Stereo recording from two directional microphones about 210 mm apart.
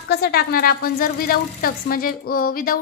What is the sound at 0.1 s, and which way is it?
A woman's voice, 50° left (ahead or behind).